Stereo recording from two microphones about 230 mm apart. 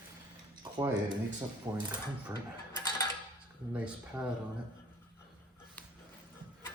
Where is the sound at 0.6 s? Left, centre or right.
Centre.